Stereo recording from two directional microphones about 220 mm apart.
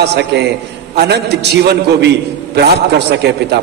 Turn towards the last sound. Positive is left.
turn(degrees=-50)  # may be behind; listen again after turning